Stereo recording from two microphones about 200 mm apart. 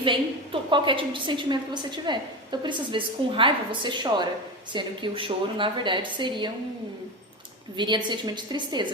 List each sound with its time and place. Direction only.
0.0 s a woman's voice: 25° right (ahead or behind)
7.8 s a woman's voice: 20° right (ahead or behind)